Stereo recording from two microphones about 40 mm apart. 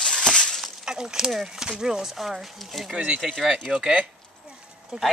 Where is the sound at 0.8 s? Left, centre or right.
Centre.